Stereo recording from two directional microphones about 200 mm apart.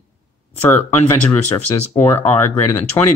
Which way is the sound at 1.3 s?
10° left (ahead or behind).